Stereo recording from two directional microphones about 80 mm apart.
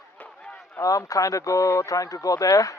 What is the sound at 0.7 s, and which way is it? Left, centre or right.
Speech, left.